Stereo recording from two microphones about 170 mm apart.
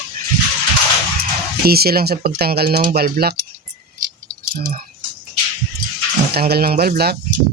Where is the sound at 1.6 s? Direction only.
65° right (ahead or behind).